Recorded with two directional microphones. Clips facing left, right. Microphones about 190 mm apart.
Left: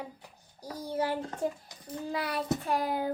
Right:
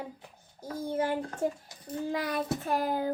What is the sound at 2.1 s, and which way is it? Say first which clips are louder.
Child singing: even; 45° right (ahead or behind).